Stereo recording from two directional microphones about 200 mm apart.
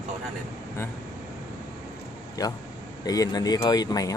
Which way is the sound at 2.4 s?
20° left (ahead or behind).